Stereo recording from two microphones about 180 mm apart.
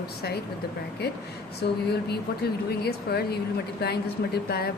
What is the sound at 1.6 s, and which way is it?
Speech, 65° left (ahead or behind).